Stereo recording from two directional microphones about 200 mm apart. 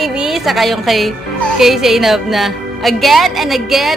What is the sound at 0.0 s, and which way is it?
A woman's voice, 5° right (ahead or behind).